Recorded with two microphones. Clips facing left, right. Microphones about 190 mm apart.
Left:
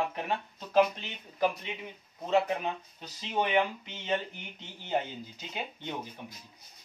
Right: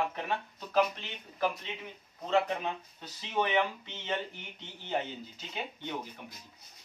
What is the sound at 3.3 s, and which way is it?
Speech, 15° left (ahead or behind).